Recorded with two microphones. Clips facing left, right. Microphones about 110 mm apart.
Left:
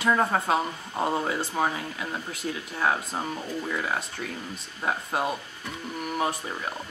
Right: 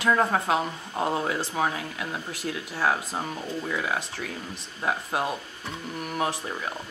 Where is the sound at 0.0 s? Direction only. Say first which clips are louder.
Right 1 dB; centre (ahead or behind).